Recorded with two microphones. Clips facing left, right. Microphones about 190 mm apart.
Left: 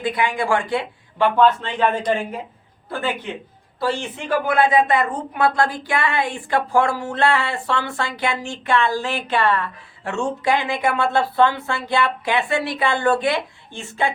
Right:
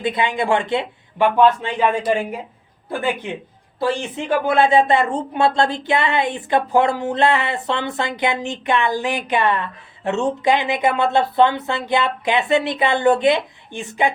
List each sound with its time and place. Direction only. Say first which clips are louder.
0.0 s speech: right 1 dB; 25° right (ahead or behind)
1.4 s speech: right 1 dB; 10° right (ahead or behind)
4.4 s speech: right 2 dB; 25° right (ahead or behind)